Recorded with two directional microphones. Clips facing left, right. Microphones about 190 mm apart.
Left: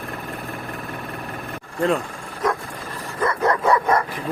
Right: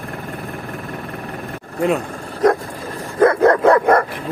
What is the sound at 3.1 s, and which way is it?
Dog, 55° right (ahead or behind).